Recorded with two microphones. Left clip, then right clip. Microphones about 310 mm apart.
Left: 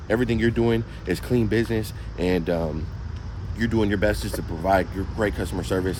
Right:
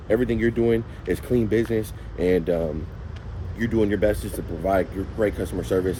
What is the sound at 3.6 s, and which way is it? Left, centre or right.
Speech, centre.